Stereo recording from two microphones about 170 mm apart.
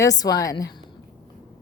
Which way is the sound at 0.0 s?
20° left (ahead or behind).